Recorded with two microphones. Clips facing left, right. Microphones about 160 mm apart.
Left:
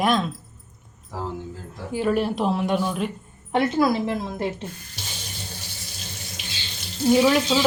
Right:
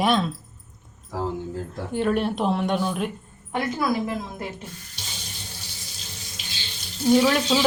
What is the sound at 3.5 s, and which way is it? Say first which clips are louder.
Speech: left 4 dB; 25° left (ahead or behind).